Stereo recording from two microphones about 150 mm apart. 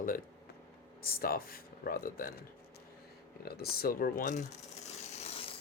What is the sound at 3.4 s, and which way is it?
Speech, 90° left.